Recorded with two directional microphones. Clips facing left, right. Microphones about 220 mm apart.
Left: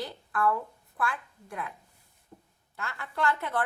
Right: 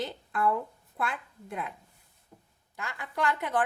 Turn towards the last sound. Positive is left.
turn(degrees=-15)  # may be behind; listen again after turning